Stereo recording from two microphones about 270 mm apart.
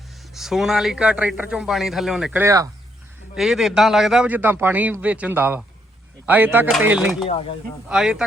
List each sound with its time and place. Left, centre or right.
0.3 s a man's voice: centre
7.3 s speech: centre
7.9 s a man's voice: centre